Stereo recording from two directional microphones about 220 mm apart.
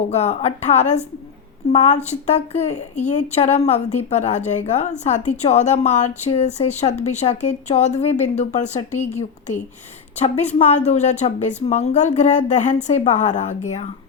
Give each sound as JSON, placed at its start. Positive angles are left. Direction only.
{"t": 0.1, "sound": "a woman's voice", "side_deg": 30}
{"t": 10.2, "sound": "a woman's voice", "side_deg": 30}